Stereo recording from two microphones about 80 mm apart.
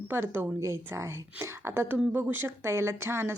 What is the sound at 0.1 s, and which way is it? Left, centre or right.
A woman's voice, right.